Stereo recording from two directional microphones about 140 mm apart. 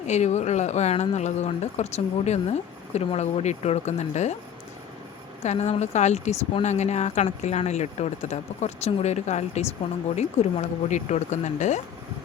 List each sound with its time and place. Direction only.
0.1 s a woman's voice: 55° left (ahead or behind)
5.4 s a woman's voice: 50° left (ahead or behind)